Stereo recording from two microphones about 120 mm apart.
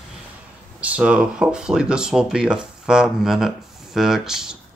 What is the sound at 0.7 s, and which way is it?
Speech, 10° right (ahead or behind).